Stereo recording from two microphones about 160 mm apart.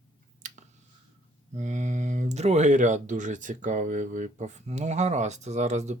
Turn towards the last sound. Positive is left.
turn(degrees=-45)  # may be behind; listen again after turning